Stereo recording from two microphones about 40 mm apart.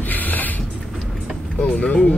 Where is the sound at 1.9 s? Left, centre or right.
Left.